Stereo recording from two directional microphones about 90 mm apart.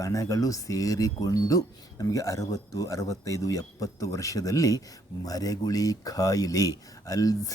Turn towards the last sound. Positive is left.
turn(degrees=40)  # may be behind; listen again after turning